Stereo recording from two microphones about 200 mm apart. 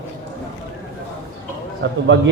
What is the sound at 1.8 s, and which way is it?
Speech, 60° right (ahead or behind).